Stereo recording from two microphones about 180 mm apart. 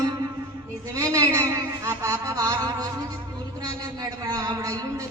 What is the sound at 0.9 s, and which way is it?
Speech, 20° right (ahead or behind).